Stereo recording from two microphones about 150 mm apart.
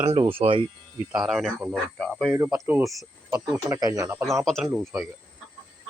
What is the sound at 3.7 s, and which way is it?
Speech, 25° right (ahead or behind).